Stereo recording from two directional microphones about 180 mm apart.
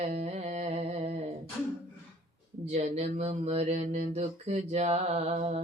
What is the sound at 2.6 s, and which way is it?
Speech, 35° right (ahead or behind).